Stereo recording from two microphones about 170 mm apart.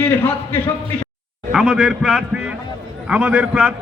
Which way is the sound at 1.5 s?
Centre (ahead or behind).